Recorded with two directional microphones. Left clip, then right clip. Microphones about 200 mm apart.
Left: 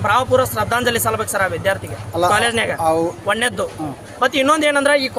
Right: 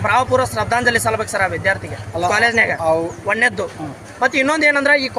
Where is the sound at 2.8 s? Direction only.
45° left (ahead or behind).